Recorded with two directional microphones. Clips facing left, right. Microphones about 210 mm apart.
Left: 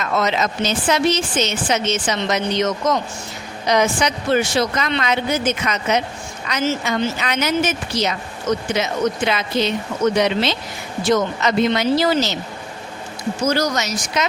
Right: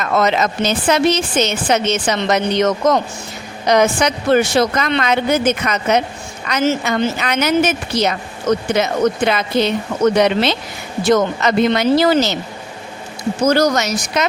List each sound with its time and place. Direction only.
0.0 s a woman's voice: 55° right (ahead or behind)
13.4 s a woman's voice: 60° right (ahead or behind)